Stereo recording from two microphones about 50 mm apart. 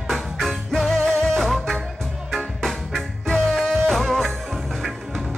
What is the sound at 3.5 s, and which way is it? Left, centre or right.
Music, centre.